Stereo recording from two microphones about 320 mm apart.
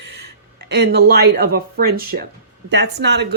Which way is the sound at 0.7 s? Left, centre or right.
Right.